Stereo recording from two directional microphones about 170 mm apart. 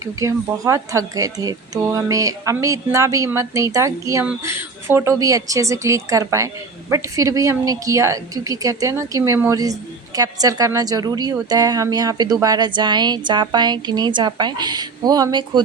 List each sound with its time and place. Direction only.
0.0 s speech: 20° right (ahead or behind)